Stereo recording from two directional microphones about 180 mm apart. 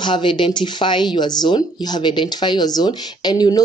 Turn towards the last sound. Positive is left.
turn(degrees=20)  # may be behind; listen again after turning